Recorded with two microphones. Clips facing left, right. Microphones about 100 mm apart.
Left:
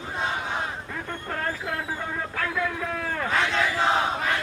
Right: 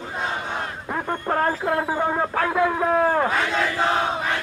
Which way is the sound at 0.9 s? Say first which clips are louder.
Right 13 dB; 40° right (ahead or behind).